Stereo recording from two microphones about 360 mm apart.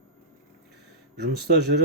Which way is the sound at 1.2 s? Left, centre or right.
Right.